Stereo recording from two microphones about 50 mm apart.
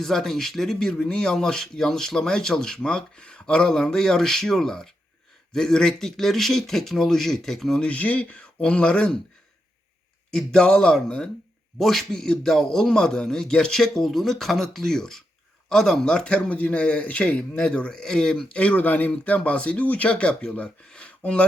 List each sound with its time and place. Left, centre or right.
0.0 s speech: centre
7.8 s speech: left
10.3 s speech: centre
16.1 s speech: left
18.4 s speech: left